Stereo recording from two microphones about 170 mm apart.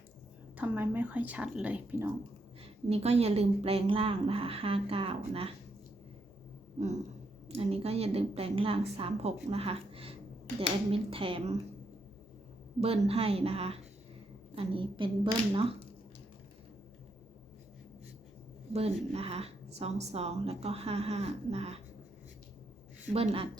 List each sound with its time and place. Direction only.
0.5 s speech: 10° right (ahead or behind)
2.9 s a woman's voice: 40° right (ahead or behind)
7.4 s a woman's voice: 35° right (ahead or behind)
12.8 s a woman's voice: 35° right (ahead or behind)
18.7 s a woman's voice: 35° right (ahead or behind)
23.1 s a woman's voice: 35° right (ahead or behind)